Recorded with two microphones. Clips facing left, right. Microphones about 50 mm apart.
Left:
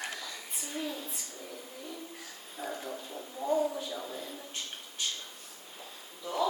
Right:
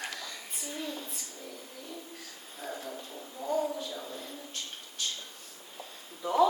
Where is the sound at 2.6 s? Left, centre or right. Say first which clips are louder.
Left 1 dB; centre.